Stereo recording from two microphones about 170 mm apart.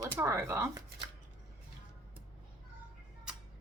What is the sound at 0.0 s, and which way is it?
Speech, 15° right (ahead or behind).